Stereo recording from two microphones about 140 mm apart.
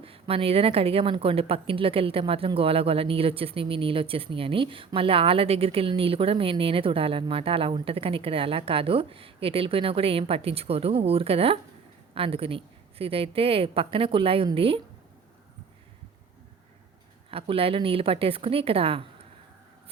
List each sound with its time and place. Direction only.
0.0 s speech: 40° right (ahead or behind)
17.3 s speech: 40° right (ahead or behind)